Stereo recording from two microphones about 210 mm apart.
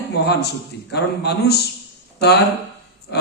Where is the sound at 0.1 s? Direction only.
50° left (ahead or behind).